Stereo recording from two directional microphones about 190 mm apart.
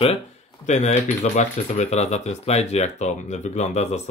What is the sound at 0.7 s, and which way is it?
Speech, 35° left (ahead or behind).